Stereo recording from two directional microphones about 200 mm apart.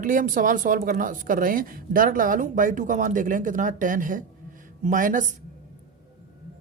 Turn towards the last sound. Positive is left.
turn(degrees=-40)  # may be behind; listen again after turning